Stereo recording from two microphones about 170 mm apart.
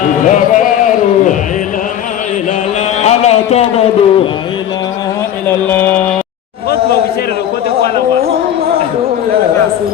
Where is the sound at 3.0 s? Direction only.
40° left (ahead or behind).